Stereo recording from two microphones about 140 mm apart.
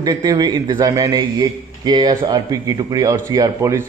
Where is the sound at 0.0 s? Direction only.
25° right (ahead or behind).